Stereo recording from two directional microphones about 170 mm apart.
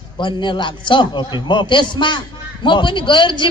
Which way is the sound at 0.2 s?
30° left (ahead or behind).